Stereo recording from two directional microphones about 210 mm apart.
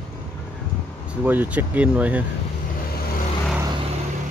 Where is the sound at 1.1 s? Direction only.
5° right (ahead or behind).